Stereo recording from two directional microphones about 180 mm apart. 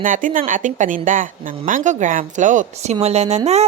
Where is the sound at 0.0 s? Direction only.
45° right (ahead or behind).